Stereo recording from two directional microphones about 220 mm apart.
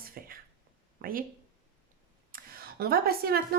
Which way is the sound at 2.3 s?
45° right (ahead or behind).